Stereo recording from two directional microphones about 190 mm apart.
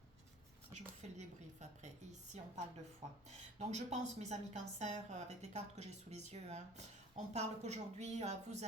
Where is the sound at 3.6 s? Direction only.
35° right (ahead or behind).